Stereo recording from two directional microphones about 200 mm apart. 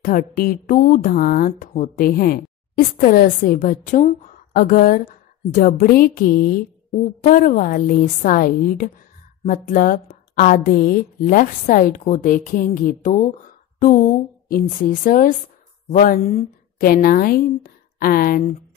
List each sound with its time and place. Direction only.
0.0 s a woman's voice: 45° left (ahead or behind)